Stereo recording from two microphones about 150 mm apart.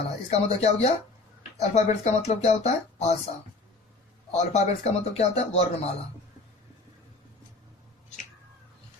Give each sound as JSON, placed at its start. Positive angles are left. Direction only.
{"t": 0.3, "sound": "speech", "side_deg": 45}